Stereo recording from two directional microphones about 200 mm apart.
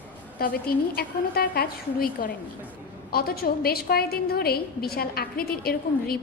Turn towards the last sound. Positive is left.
turn(degrees=50)  # may be behind; listen again after turning